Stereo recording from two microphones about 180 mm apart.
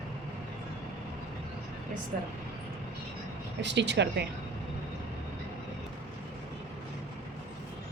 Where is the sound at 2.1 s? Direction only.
55° right (ahead or behind).